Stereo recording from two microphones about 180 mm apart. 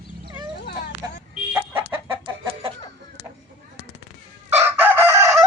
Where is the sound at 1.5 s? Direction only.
15° right (ahead or behind).